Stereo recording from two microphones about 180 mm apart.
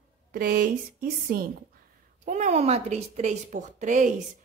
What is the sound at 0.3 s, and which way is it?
A woman's voice, 50° right (ahead or behind).